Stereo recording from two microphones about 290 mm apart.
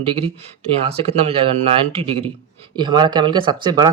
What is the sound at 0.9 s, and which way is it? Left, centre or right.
Speech, right.